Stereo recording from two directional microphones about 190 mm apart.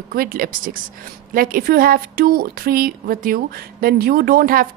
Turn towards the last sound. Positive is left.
turn(degrees=-50)  # may be behind; listen again after turning